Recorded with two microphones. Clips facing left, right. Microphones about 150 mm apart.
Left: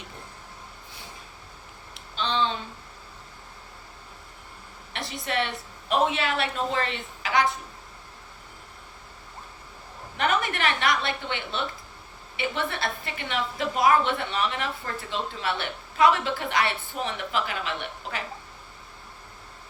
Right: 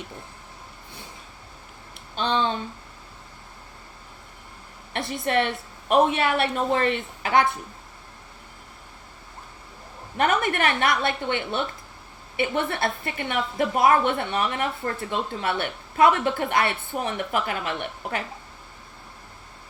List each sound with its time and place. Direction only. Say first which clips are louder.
2.1 s a woman's voice: right 2 dB; 55° right (ahead or behind)
4.9 s a woman's voice: right 5 dB; 55° right (ahead or behind)
10.2 s a woman's voice: right 3 dB; 50° right (ahead or behind)